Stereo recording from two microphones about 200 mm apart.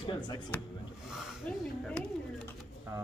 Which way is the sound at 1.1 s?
Centre (ahead or behind).